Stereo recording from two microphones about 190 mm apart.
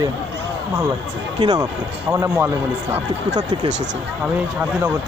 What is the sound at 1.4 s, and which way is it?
A man's voice, 20° right (ahead or behind).